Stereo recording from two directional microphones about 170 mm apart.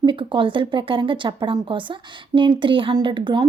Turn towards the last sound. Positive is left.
turn(degrees=-30)  # may be behind; listen again after turning